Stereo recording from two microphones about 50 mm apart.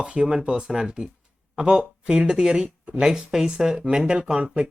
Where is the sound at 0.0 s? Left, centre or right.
Centre.